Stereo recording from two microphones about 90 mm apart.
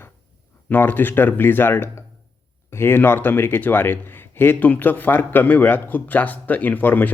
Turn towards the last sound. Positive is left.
turn(degrees=20)  # may be behind; listen again after turning